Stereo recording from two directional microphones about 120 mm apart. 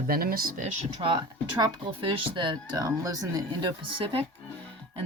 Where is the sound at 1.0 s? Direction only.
40° right (ahead or behind).